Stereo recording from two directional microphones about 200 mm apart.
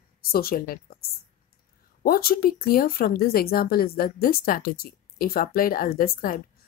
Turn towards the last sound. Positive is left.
turn(degrees=45)  # may be behind; listen again after turning